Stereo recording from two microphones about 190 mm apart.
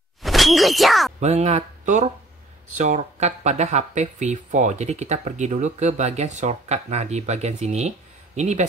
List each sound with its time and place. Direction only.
0.2 s speech: centre (ahead or behind)
1.2 s speech: 35° right (ahead or behind)